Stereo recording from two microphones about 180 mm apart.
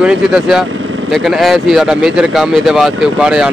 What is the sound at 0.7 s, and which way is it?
Vehicle, 90° right.